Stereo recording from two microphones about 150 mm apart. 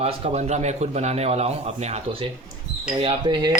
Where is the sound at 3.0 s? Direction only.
35° right (ahead or behind).